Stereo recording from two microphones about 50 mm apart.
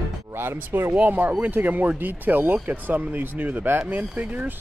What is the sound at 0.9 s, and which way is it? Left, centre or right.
Speech, right.